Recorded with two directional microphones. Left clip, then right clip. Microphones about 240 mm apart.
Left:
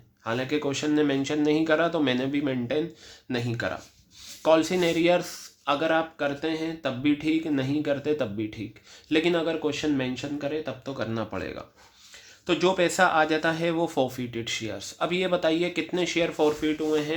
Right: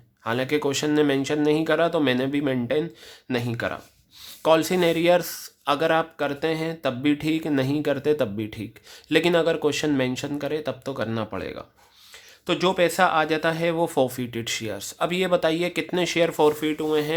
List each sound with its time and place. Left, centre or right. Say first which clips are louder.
0.3 s speech: right 4 dB; right